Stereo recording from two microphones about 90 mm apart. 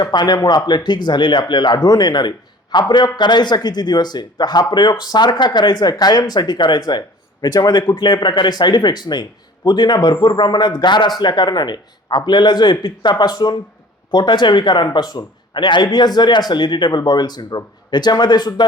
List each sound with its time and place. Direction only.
0.0 s speech: 50° left (ahead or behind)